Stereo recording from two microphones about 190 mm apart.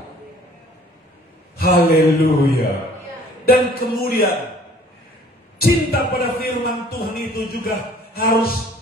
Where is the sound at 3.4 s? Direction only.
55° left (ahead or behind).